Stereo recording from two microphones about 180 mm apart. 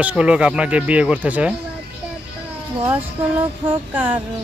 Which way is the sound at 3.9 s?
10° right (ahead or behind).